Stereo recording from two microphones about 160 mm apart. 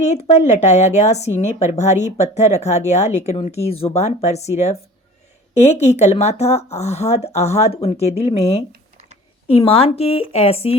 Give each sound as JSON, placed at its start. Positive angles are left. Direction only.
{"t": 0.0, "sound": "speech", "side_deg": 45}
{"t": 8.7, "sound": "a sound", "side_deg": -50}
{"t": 9.5, "sound": "speech", "side_deg": 35}